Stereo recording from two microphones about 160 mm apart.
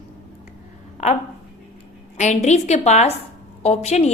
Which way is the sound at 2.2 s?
45° left (ahead or behind).